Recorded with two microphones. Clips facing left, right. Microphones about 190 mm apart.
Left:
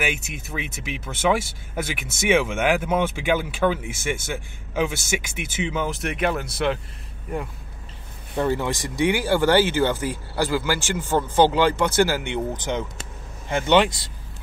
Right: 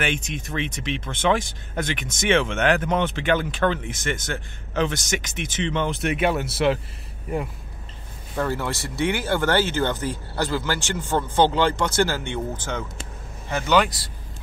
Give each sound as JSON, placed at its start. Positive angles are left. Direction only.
{"t": 0.0, "sound": "speech", "side_deg": 5}
{"t": 8.4, "sound": "speech", "side_deg": 15}
{"t": 13.5, "sound": "speech", "side_deg": 30}